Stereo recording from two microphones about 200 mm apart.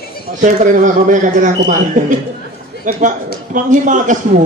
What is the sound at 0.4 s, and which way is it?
A man's voice, 40° right (ahead or behind).